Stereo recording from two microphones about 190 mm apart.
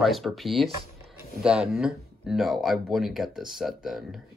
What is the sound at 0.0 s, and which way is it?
Speech, centre (ahead or behind).